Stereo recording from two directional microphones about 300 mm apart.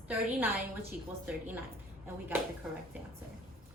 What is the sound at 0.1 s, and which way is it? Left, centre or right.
A woman's voice, centre.